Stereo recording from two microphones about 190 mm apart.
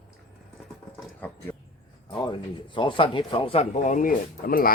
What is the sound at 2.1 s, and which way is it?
Speech, 25° left (ahead or behind).